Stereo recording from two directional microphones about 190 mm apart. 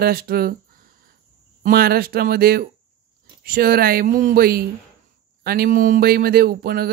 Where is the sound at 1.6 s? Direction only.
50° right (ahead or behind).